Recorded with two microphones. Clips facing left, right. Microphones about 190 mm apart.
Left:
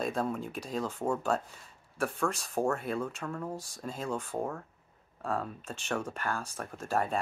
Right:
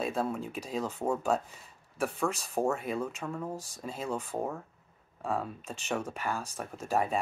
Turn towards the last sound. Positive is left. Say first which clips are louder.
# right 1 dB
turn(degrees=-5)  # may be behind; listen again after turning